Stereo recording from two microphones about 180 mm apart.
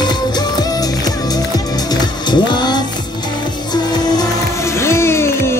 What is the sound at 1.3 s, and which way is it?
Music, 20° left (ahead or behind).